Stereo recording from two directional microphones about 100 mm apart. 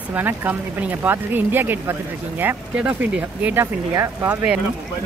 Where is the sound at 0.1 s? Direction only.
20° right (ahead or behind).